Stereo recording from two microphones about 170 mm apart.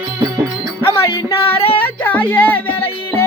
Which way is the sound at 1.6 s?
35° left (ahead or behind).